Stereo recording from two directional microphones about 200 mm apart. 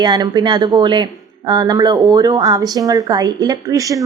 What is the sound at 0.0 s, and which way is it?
A woman's voice, 20° right (ahead or behind).